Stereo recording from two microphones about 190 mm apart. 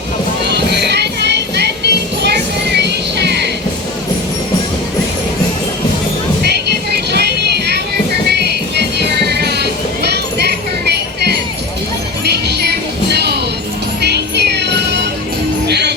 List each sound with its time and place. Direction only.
0.4 s music: 60° right (ahead or behind)
7.1 s music: 60° right (ahead or behind)